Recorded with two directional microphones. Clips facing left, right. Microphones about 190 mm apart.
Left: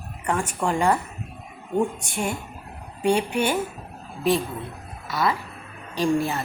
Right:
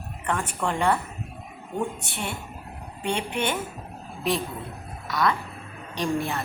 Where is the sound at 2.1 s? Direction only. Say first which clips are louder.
Left 5 dB; 45° left (ahead or behind).